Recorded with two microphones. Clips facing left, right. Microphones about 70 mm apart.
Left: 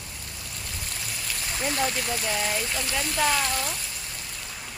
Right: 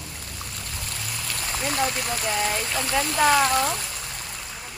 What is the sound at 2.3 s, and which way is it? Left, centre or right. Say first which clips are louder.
Speech: right 3 dB; centre.